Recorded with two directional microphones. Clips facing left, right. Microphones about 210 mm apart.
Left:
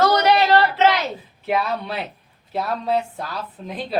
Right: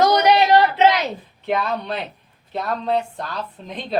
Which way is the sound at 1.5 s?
5° left (ahead or behind).